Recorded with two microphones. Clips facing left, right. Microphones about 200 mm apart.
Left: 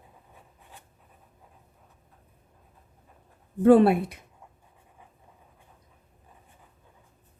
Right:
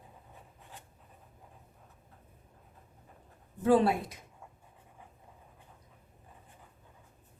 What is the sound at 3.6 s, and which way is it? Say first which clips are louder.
Speech: left 8 dB; 60° left (ahead or behind).